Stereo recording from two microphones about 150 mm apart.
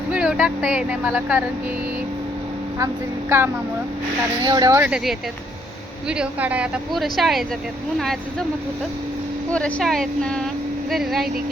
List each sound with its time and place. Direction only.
0.1 s speech: 5° right (ahead or behind)
2.7 s speech: 20° right (ahead or behind)
4.8 s speech: 5° right (ahead or behind)
9.5 s speech: 10° left (ahead or behind)